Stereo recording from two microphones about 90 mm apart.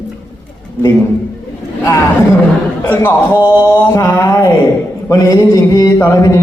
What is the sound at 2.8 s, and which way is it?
A man's voice, 25° left (ahead or behind).